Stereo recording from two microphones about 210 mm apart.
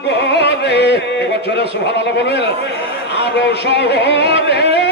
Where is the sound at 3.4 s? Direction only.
55° left (ahead or behind).